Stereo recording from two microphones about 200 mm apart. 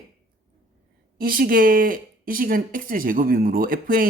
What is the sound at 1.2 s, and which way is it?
Speech, 45° right (ahead or behind).